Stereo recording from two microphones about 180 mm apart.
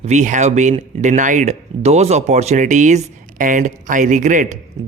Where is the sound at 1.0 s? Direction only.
45° right (ahead or behind).